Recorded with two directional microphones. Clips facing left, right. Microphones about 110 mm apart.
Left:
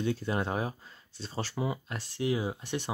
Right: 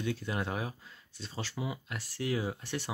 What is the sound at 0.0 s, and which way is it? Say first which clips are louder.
Speech: left 4 dB; 35° left (ahead or behind).